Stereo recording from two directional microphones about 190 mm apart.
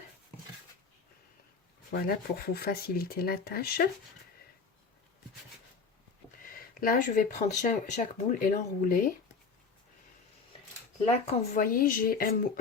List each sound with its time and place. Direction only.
1.9 s speech: 50° left (ahead or behind)
6.4 s speech: 50° left (ahead or behind)
11.1 s speech: 35° left (ahead or behind)
11.6 s speech: 45° left (ahead or behind)